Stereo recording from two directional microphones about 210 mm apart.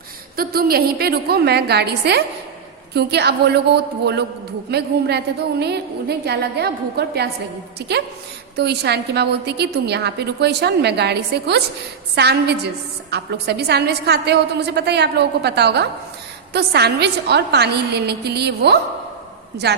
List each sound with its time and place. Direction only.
0.3 s a woman's voice: 45° right (ahead or behind)